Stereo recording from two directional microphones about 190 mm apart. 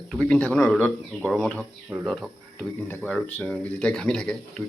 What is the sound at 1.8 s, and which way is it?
Speech, 10° right (ahead or behind).